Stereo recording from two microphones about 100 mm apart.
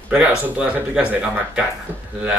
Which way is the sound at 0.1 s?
15° right (ahead or behind).